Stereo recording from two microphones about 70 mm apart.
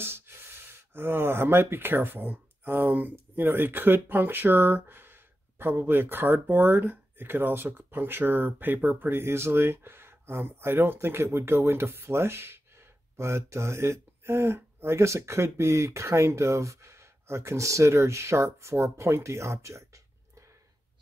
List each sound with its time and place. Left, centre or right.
0.0 s speech: right